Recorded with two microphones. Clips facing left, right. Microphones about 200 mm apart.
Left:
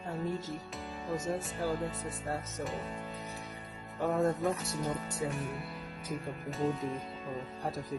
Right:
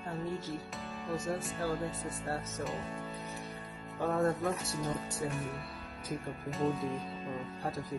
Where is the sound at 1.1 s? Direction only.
20° left (ahead or behind).